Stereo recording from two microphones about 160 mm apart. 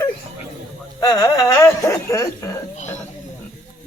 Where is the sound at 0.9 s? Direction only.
20° left (ahead or behind).